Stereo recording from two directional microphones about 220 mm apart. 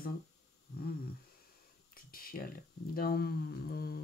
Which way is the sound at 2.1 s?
40° left (ahead or behind).